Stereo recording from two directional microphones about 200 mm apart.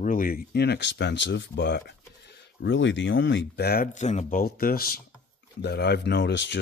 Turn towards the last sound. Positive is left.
turn(degrees=60)  # may be behind; listen again after turning